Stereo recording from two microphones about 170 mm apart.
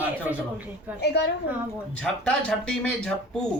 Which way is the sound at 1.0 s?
80° left.